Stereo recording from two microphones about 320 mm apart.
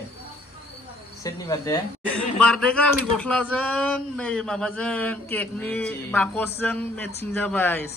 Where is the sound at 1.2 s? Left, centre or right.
Centre.